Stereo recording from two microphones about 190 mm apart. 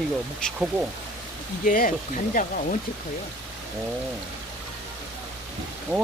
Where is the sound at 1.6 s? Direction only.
45° left (ahead or behind).